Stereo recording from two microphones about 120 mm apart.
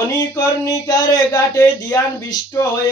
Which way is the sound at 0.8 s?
30° left (ahead or behind).